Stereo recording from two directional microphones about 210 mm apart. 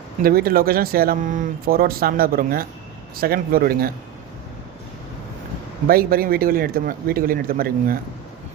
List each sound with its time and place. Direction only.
0.2 s speech: 45° right (ahead or behind)
5.9 s speech: 45° right (ahead or behind)